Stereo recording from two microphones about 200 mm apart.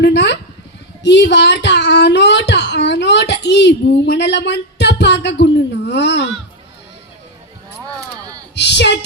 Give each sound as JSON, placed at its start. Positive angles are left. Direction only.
{"t": 0.0, "sound": "a sound", "side_deg": 60}
{"t": 1.0, "sound": "a child's voice", "side_deg": 60}
{"t": 8.5, "sound": "a woman's voice", "side_deg": 60}